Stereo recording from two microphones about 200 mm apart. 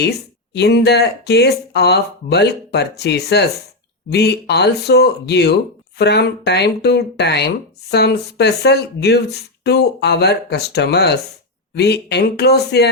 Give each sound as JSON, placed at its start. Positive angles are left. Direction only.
{"t": 0.5, "sound": "speech", "side_deg": 55}